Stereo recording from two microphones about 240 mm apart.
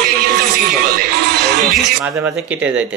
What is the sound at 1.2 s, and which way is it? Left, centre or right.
Speech, right.